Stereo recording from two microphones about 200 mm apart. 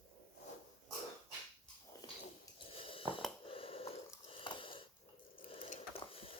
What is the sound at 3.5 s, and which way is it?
Wheeze, 30° left (ahead or behind).